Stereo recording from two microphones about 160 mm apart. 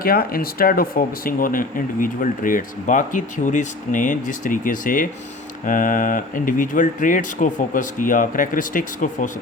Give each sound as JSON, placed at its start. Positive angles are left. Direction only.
{"t": 0.0, "sound": "speech", "side_deg": 65}